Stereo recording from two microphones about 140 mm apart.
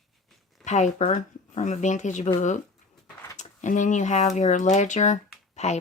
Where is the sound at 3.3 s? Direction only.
60° left (ahead or behind).